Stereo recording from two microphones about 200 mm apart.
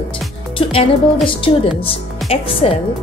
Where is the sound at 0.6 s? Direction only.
25° left (ahead or behind).